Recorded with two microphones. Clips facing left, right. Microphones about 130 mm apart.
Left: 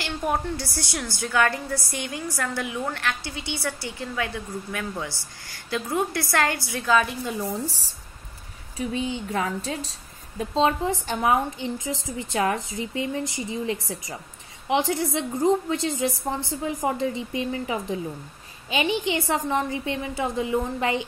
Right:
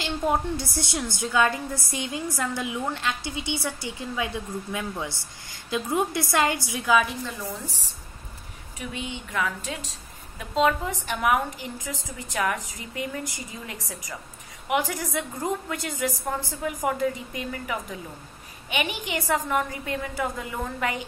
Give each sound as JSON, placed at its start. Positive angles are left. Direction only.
{"t": 0.0, "sound": "a woman's voice", "side_deg": -20}
{"t": 7.4, "sound": "a woman's voice", "side_deg": 35}